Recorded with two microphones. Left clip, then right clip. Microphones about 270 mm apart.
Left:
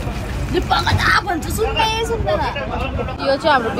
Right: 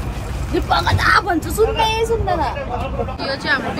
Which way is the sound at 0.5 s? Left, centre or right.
Right.